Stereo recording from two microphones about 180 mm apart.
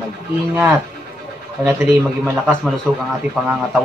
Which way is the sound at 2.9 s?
Centre (ahead or behind).